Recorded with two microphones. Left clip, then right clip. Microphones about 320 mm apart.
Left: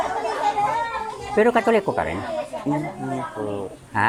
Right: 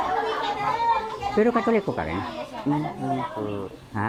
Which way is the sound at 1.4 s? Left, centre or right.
Left.